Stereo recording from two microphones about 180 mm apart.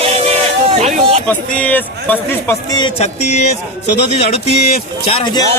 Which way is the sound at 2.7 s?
25° left (ahead or behind).